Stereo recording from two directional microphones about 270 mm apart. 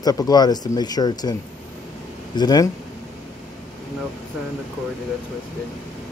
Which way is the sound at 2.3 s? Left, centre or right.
Centre.